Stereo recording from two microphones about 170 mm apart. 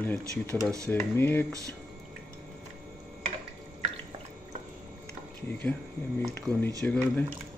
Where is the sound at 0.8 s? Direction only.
10° left (ahead or behind).